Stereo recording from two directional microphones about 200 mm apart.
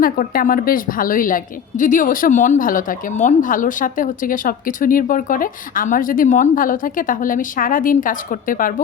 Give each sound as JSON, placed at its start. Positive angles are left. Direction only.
{"t": 0.0, "sound": "a woman's voice", "side_deg": 45}